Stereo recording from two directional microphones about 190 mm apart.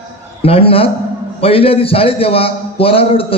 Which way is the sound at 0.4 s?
30° left (ahead or behind).